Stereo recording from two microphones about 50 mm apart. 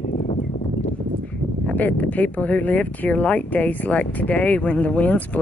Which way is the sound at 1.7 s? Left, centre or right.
Left.